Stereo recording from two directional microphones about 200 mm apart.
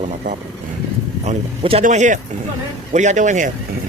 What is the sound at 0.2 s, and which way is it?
Speech, 40° right (ahead or behind).